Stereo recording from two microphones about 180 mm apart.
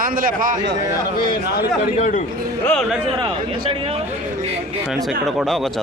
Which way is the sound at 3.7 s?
30° right (ahead or behind).